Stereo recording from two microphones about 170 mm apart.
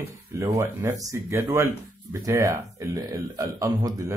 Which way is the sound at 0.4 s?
15° right (ahead or behind).